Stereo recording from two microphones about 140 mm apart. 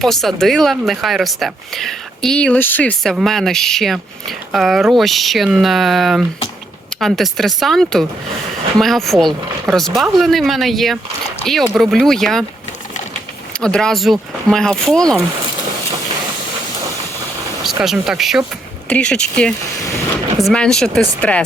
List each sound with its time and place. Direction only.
0.0 s speech: centre (ahead or behind)
3.0 s speech: centre (ahead or behind)
13.5 s speech: 5° left (ahead or behind)
17.8 s speech: 5° right (ahead or behind)